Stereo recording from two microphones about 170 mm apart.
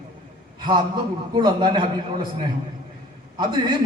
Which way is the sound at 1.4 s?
25° right (ahead or behind).